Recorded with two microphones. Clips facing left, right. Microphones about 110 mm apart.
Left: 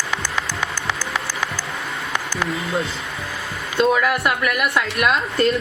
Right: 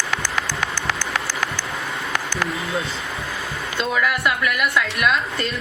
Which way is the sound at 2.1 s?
Centre (ahead or behind).